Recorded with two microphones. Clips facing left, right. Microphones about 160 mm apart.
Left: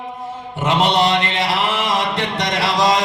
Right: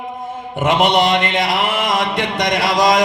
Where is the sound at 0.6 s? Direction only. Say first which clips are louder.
Right 2 dB; 15° right (ahead or behind).